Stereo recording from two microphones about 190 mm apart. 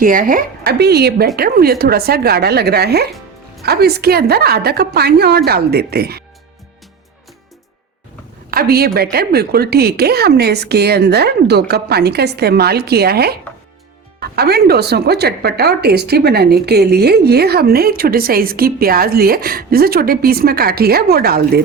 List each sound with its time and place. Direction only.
0.0 s speech: 45° right (ahead or behind)
8.4 s speech: 50° right (ahead or behind)